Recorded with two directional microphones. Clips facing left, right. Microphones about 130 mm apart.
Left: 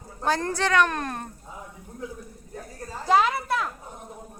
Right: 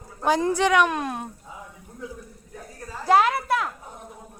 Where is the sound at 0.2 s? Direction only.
10° right (ahead or behind).